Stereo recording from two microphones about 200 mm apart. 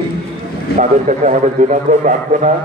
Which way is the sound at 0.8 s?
40° right (ahead or behind).